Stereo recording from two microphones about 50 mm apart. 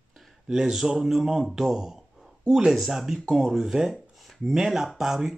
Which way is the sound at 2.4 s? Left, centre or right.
Centre.